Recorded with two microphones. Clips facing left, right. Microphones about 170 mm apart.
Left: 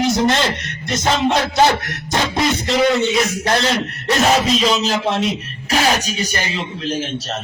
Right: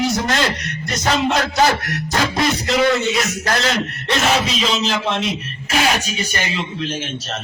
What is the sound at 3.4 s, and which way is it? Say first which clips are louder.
Speech: left 2 dB; 30° left (ahead or behind).